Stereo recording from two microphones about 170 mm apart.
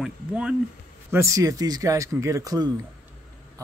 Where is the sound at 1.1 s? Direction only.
15° right (ahead or behind).